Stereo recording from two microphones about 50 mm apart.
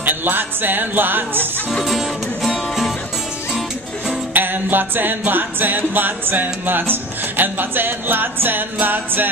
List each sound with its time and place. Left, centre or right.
0.0 s music: right
2.4 s music: centre
4.3 s music: right